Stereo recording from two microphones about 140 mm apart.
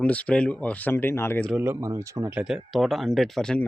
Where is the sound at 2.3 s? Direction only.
5° right (ahead or behind).